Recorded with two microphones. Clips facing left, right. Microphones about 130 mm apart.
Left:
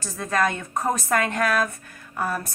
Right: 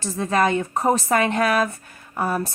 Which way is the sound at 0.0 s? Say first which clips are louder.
Right 3 dB; 25° right (ahead or behind).